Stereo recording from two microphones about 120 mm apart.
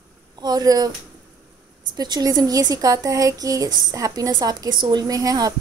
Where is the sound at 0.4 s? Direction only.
35° right (ahead or behind).